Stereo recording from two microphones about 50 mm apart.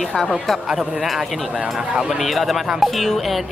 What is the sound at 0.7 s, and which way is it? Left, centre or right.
Speech, centre.